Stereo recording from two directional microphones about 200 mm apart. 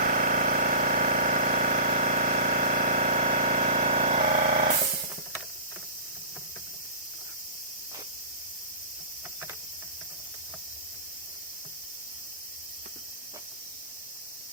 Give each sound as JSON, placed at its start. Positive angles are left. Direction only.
{"t": 0.0, "sound": "engine", "side_deg": -45}